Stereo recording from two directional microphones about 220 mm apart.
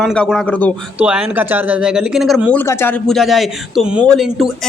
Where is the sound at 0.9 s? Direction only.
5° right (ahead or behind).